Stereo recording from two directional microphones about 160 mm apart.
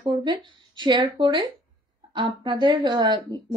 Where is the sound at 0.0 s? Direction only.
30° right (ahead or behind).